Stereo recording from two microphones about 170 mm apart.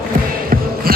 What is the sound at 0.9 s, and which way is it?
Music, 60° right (ahead or behind).